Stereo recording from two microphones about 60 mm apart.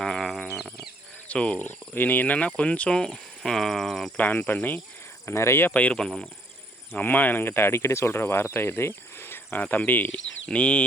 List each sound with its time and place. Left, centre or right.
0.0 s a sound: centre
1.3 s speech: left
3.0 s speech: centre
4.2 s speech: left
5.2 s speech: left
5.7 s speech: left
6.0 s speech: centre
6.9 s speech: left
10.5 s speech: left